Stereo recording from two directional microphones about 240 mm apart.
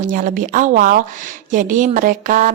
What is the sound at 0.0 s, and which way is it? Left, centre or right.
Speech, right.